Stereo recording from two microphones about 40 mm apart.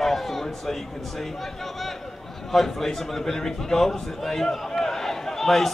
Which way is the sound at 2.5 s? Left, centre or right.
Centre.